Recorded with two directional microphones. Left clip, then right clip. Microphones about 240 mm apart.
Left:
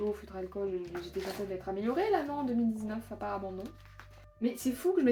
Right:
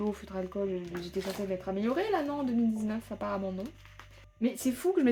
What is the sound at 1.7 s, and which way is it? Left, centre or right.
Speech, right.